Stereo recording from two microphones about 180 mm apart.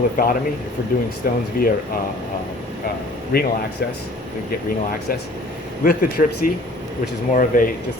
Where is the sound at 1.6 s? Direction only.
55° left (ahead or behind).